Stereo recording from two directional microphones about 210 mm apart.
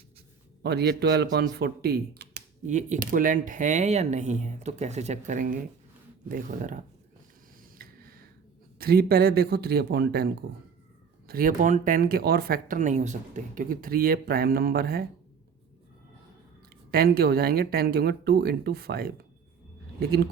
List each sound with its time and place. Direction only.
0.6 s speech: 50° right (ahead or behind)
2.6 s speech: 35° right (ahead or behind)
7.8 s a sound: 45° right (ahead or behind)
8.8 s speech: 50° right (ahead or behind)
16.9 s speech: 45° right (ahead or behind)